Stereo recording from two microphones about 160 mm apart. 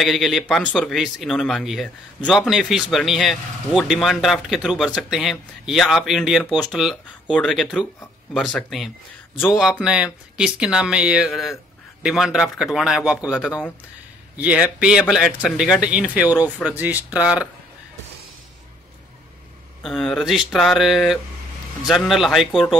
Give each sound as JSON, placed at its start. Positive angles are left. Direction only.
{"t": 0.0, "sound": "a man's voice", "side_deg": 0}
{"t": 19.8, "sound": "a man's voice", "side_deg": 0}